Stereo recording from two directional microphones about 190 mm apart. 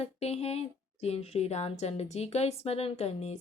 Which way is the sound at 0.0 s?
35° left (ahead or behind).